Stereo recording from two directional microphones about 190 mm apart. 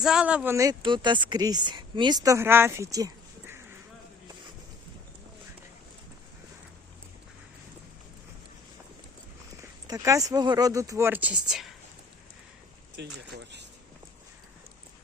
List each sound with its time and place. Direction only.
0.0 s speech: 5° right (ahead or behind)
9.8 s speech: 15° right (ahead or behind); by 11.7 s centre (ahead or behind)
13.0 s speech: 65° right (ahead or behind)